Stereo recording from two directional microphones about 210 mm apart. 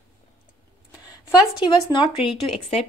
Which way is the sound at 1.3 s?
20° left (ahead or behind).